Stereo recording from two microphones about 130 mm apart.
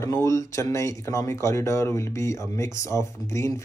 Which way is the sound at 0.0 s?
25° left (ahead or behind).